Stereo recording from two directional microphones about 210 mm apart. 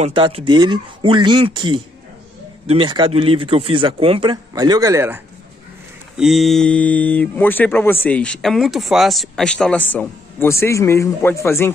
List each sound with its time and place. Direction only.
0.0 s a man's voice: 25° right (ahead or behind)
6.1 s speech: centre (ahead or behind)